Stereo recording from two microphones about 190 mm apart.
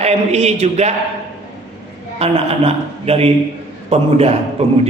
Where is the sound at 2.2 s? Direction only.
30° right (ahead or behind).